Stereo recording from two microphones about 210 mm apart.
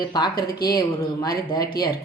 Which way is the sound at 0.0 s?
20° left (ahead or behind).